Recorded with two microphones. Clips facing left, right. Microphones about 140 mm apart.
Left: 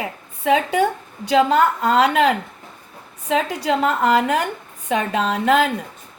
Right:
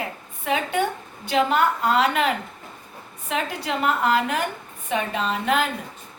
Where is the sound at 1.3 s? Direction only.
90° left.